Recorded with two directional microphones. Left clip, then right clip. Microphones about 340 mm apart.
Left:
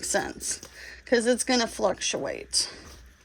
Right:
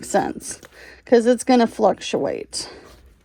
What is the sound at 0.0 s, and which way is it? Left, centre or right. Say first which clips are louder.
Speech: right 7 dB; centre.